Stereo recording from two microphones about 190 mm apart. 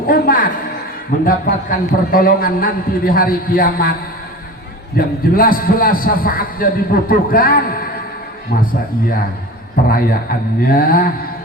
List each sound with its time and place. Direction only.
0.1 s a man's voice: 50° left (ahead or behind)
4.9 s a man's voice: 50° left (ahead or behind)
9.9 s a man's voice: 50° left (ahead or behind)